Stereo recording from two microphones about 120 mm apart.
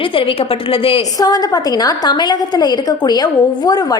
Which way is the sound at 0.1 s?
50° left (ahead or behind).